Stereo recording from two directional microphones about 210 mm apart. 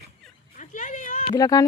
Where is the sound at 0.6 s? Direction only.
35° left (ahead or behind).